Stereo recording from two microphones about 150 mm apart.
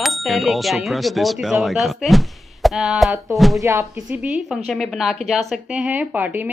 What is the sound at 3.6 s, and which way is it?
Speech, 20° right (ahead or behind).